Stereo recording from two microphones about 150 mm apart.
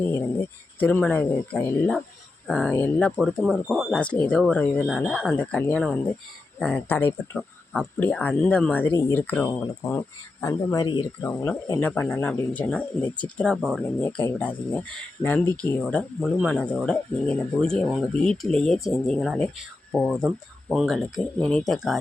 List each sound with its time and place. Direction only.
0.8 s speech: 10° left (ahead or behind)
3.2 s speech: centre (ahead or behind); by 11.0 s 30° left (ahead or behind)
11.2 s speech: 15° left (ahead or behind)